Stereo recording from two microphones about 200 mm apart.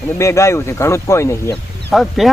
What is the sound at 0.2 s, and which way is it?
Speech, 15° left (ahead or behind).